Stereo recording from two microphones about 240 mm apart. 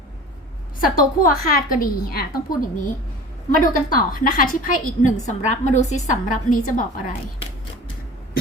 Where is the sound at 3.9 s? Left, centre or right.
Left.